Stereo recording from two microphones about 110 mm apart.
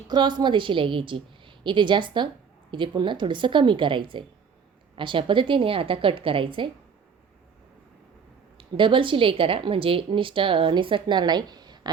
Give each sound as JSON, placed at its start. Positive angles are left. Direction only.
{"t": 0.1, "sound": "a woman's voice", "side_deg": -40}
{"t": 8.5, "sound": "a woman's voice", "side_deg": -50}